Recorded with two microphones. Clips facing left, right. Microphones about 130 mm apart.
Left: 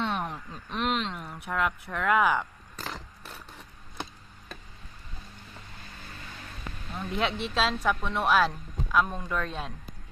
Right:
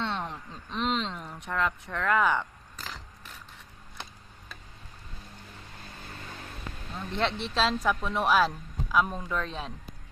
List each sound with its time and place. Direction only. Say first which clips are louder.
0.0 s a sound: left 2 dB; 15° left (ahead or behind)
0.8 s speech: even; 5° left (ahead or behind)
6.9 s speech: even; 5° left (ahead or behind)